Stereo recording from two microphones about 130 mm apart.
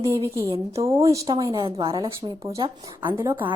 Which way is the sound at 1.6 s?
45° right (ahead or behind).